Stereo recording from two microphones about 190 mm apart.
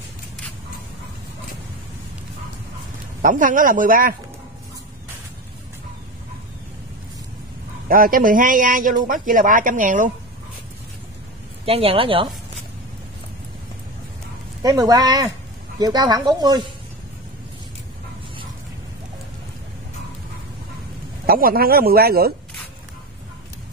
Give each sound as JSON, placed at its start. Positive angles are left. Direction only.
{"t": 3.2, "sound": "speech", "side_deg": -45}
{"t": 7.9, "sound": "speech", "side_deg": -50}
{"t": 11.6, "sound": "speech", "side_deg": -30}
{"t": 14.6, "sound": "speech", "side_deg": -20}
{"t": 21.3, "sound": "speech", "side_deg": -50}